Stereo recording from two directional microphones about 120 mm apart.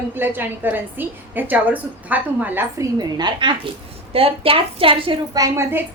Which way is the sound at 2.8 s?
35° right (ahead or behind).